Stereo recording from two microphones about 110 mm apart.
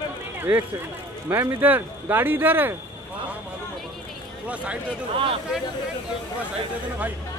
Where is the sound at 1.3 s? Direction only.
15° right (ahead or behind).